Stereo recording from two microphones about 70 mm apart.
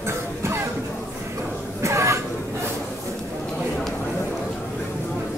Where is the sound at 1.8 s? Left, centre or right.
Right.